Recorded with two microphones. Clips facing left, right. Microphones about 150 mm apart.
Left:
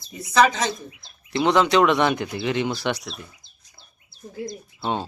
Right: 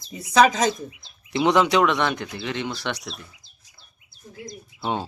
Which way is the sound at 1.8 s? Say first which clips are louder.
Left 3 dB; 5° left (ahead or behind).